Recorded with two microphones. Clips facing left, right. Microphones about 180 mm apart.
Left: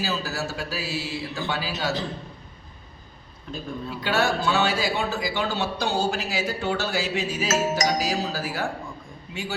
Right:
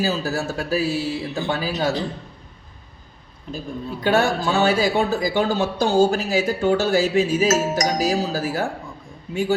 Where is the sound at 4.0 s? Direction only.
50° right (ahead or behind).